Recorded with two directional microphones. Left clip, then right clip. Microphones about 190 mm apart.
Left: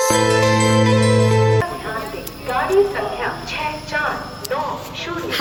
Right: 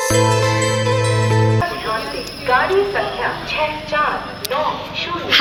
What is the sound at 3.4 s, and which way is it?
Speech, 50° right (ahead or behind).